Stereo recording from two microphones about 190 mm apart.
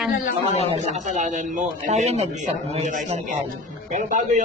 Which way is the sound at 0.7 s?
35° right (ahead or behind).